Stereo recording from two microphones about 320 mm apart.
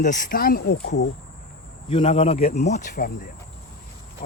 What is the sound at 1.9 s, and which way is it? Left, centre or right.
Speech, centre.